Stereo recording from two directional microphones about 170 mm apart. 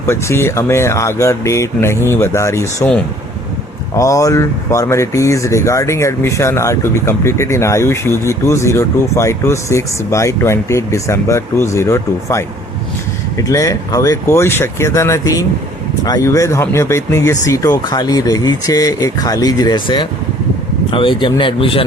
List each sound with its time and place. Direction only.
0.0 s speech: 15° left (ahead or behind)
3.9 s speech: 20° left (ahead or behind)